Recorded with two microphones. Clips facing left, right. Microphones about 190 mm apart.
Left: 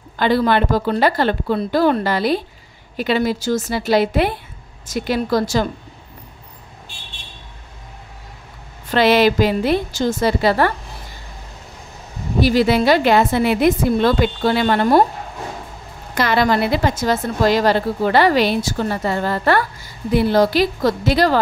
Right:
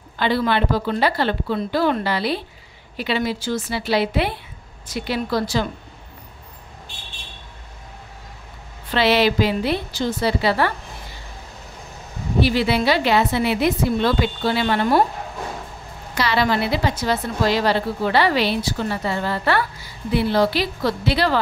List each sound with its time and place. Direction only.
0.2 s a woman's voice: 45° left (ahead or behind)
8.9 s a woman's voice: 45° left (ahead or behind)
12.4 s a woman's voice: 40° left (ahead or behind)
16.2 s a woman's voice: 50° left (ahead or behind)